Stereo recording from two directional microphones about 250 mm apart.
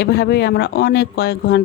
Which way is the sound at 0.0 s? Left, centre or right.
Left.